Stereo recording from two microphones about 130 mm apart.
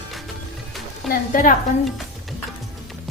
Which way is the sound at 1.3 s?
90° left.